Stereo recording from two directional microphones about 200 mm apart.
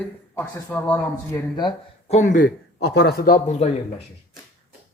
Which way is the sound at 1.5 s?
20° left (ahead or behind).